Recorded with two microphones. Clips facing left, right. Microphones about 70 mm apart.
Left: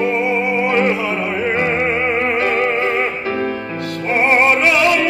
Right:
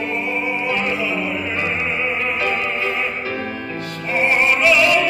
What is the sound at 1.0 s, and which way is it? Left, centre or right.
Opera, left.